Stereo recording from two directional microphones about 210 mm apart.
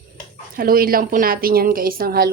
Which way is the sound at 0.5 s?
45° right (ahead or behind).